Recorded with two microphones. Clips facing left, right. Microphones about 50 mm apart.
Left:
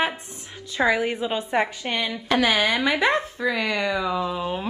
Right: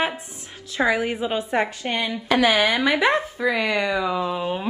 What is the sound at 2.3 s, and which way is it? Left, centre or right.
Speech, right.